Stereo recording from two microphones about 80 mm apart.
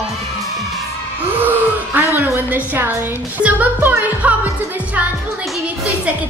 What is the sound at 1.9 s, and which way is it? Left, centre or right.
Music, right.